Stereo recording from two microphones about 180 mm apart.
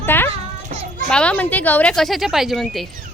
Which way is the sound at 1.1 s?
5° left (ahead or behind).